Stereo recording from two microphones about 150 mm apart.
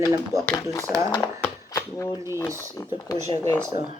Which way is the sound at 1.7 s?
20° left (ahead or behind).